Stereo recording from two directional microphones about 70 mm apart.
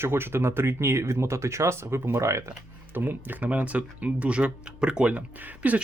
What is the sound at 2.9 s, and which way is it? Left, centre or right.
Speech, right.